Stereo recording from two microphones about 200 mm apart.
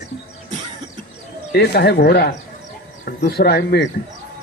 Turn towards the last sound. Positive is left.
turn(degrees=55)  # may be behind; listen again after turning